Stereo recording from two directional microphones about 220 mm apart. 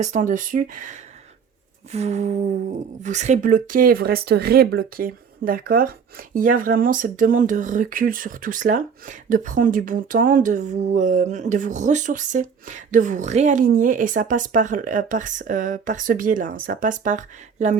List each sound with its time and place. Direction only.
0.0 s speech: 35° right (ahead or behind)